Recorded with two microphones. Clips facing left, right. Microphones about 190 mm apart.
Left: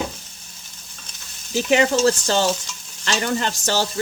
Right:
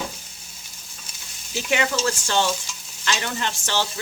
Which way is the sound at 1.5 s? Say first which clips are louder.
Left 6 dB; 40° left (ahead or behind).